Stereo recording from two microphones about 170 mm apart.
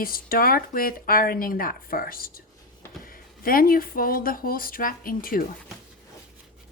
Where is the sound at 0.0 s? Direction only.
60° left (ahead or behind).